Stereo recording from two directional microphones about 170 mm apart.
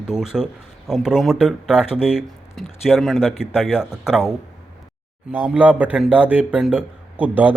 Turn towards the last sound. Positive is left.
turn(degrees=-10)  # may be behind; listen again after turning